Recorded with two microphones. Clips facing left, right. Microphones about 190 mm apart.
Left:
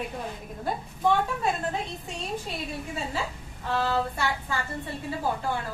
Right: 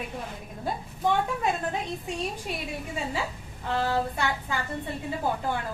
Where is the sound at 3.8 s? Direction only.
15° right (ahead or behind).